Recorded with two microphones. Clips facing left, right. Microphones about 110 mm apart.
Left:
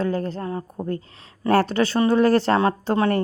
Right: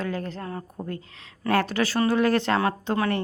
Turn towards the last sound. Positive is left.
turn(degrees=40)  # may be behind; listen again after turning